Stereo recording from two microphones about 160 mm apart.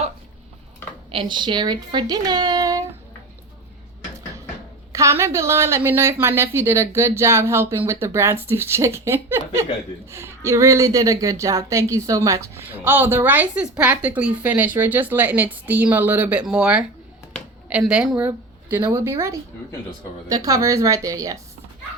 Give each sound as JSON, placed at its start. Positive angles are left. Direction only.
{"t": 1.1, "sound": "speech", "side_deg": -30}
{"t": 4.9, "sound": "a woman's voice", "side_deg": -20}